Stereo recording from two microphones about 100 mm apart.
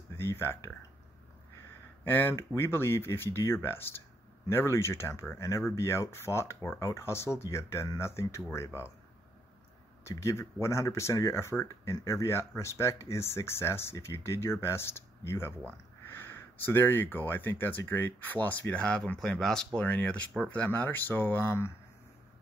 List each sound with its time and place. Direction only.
0.1 s speech: 25° left (ahead or behind)
2.0 s speech: 20° left (ahead or behind)
10.0 s speech: 30° left (ahead or behind)